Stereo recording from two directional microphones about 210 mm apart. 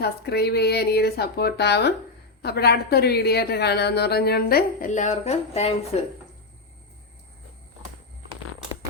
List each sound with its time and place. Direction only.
0.0 s a woman's voice: 50° left (ahead or behind); by 6.1 s 30° left (ahead or behind)